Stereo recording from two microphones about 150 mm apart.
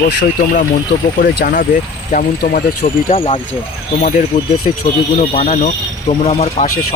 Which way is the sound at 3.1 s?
40° left (ahead or behind).